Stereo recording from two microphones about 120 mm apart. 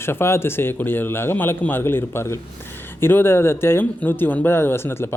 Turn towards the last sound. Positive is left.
turn(degrees=20)  # may be behind; listen again after turning